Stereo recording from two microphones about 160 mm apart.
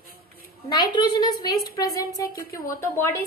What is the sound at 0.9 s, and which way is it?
A woman's voice, 30° left (ahead or behind).